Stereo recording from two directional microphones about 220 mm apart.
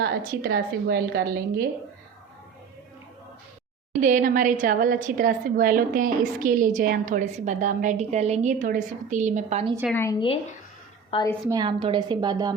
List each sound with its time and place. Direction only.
0.0 s a woman's voice: 40° right (ahead or behind)
4.0 s a woman's voice: 35° right (ahead or behind)
9.9 s a woman's voice: 15° left (ahead or behind)
11.4 s a woman's voice: 20° right (ahead or behind)